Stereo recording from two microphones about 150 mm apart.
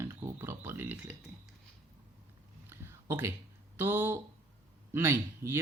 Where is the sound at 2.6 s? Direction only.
15° right (ahead or behind).